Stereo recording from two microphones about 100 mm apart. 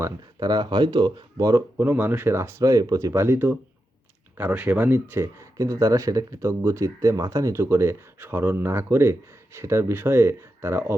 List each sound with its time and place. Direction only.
0.3 s speech: 45° right (ahead or behind)
1.8 s speech: 20° right (ahead or behind)